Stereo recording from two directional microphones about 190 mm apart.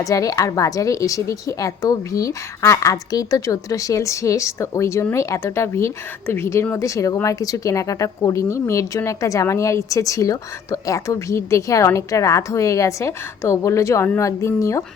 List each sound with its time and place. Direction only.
0.0 s a woman's voice: 20° left (ahead or behind)